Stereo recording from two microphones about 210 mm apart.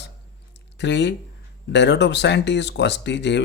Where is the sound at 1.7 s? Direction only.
55° left (ahead or behind).